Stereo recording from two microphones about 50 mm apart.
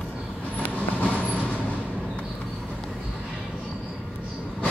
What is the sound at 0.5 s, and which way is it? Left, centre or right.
Vehicle, left.